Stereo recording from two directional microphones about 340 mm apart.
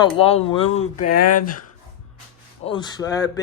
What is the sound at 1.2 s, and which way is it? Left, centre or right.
Speech, left.